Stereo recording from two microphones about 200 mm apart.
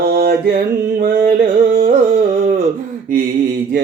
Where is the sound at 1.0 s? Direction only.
45° right (ahead or behind).